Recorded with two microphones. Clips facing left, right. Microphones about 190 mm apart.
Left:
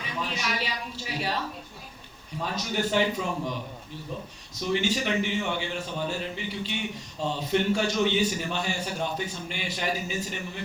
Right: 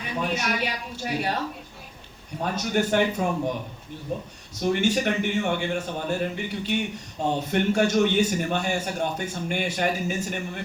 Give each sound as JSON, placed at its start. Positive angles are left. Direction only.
{"t": 0.0, "sound": "a man's voice", "side_deg": -55}
{"t": 2.4, "sound": "a man's voice", "side_deg": -50}